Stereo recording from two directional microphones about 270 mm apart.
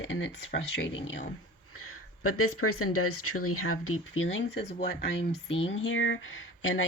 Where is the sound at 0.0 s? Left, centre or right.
Left.